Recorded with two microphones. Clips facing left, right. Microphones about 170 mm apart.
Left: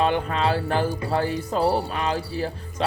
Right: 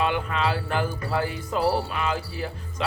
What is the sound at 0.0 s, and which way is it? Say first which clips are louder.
Speech: left 3 dB; 35° left (ahead or behind).